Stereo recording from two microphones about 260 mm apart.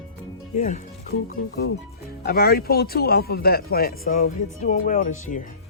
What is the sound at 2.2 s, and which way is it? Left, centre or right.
Speech, left.